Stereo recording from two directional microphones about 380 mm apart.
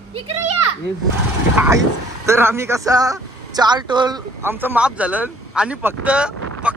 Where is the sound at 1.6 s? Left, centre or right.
Centre.